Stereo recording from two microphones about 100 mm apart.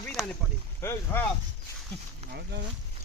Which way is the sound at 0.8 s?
30° left (ahead or behind).